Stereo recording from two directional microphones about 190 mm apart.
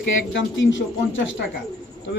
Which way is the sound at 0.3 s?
80° left.